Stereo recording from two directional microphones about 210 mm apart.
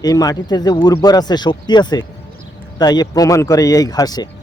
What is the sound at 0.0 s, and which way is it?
Speech, 15° left (ahead or behind).